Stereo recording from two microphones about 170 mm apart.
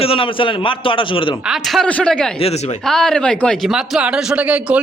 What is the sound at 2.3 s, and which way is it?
Speech, 40° left (ahead or behind).